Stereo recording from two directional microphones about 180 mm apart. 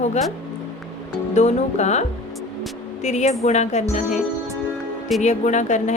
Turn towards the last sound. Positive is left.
turn(degrees=40)  # may be behind; listen again after turning